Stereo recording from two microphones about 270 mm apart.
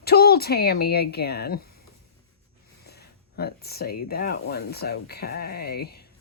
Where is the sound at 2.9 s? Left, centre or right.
Left.